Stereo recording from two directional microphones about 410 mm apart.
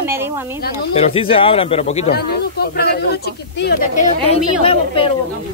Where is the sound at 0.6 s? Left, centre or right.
Centre.